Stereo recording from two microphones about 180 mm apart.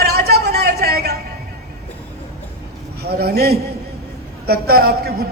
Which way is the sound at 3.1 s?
60° right (ahead or behind).